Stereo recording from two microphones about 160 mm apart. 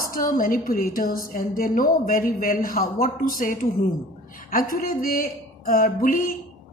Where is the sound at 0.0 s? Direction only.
60° left (ahead or behind).